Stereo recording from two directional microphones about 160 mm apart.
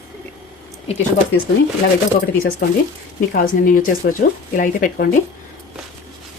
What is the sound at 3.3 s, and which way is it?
Speech, 60° left (ahead or behind).